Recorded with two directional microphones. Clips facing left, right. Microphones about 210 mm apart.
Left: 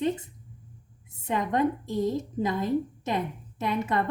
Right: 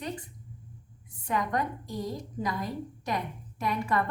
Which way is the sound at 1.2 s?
25° left (ahead or behind).